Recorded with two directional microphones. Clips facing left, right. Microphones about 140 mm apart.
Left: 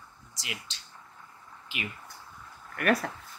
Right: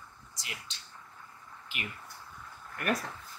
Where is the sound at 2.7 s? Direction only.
85° left.